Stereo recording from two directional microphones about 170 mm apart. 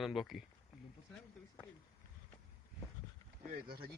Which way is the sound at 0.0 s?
Centre (ahead or behind).